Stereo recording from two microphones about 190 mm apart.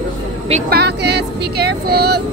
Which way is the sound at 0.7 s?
60° right (ahead or behind).